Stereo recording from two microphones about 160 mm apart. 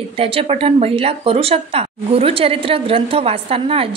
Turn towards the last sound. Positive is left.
turn(degrees=-35)  # may be behind; listen again after turning